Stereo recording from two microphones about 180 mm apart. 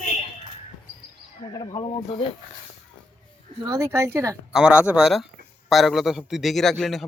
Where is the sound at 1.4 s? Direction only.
25° left (ahead or behind).